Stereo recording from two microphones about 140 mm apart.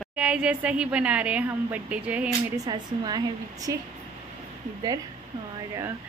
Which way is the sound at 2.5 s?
30° right (ahead or behind).